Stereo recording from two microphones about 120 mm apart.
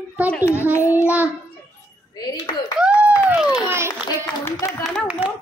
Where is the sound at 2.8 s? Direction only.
10° right (ahead or behind).